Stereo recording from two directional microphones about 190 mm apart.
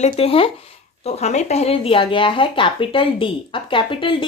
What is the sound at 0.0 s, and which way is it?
Speech, 30° left (ahead or behind).